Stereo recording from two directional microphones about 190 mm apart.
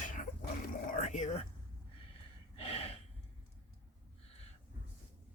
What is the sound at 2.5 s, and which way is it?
Gasp, 30° left (ahead or behind).